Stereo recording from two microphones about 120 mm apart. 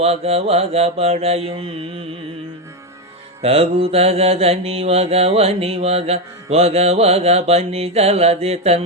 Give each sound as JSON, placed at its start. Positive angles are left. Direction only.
{"t": 0.0, "sound": "mantra", "side_deg": -60}
{"t": 3.4, "sound": "mantra", "side_deg": -55}